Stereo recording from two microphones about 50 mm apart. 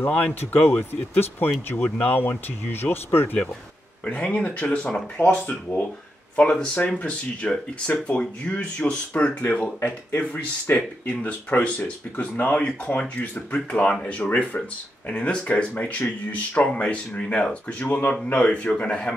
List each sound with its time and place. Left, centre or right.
0.1 s speech: left
0.7 s speech: left
4.0 s speech: left
9.8 s speech: left
13.5 s speech: left